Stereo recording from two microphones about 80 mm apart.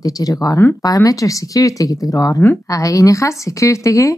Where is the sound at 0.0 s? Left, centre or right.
Left.